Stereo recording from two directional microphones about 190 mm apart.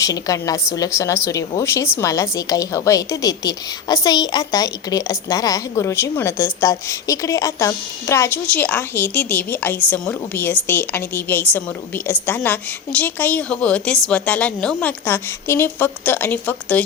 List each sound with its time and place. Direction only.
0.0 s a woman's voice: 20° left (ahead or behind)